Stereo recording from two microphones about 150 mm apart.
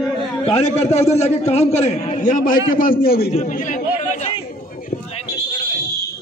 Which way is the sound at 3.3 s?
50° left (ahead or behind).